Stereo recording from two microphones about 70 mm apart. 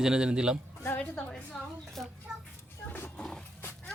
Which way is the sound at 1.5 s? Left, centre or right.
Centre.